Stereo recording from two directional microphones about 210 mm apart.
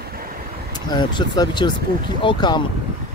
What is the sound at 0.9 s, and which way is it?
Speech, 20° left (ahead or behind).